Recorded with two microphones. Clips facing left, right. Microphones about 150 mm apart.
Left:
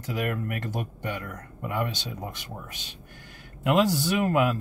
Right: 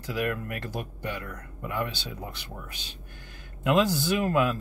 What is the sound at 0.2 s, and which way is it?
Speech, 15° left (ahead or behind).